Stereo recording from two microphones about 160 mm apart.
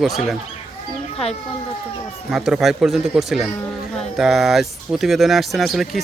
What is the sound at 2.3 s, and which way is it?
Speech, centre (ahead or behind).